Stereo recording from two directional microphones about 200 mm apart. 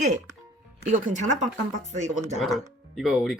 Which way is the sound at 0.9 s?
35° right (ahead or behind).